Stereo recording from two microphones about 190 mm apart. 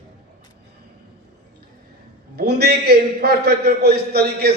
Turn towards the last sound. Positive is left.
turn(degrees=-55)  # may be behind; listen again after turning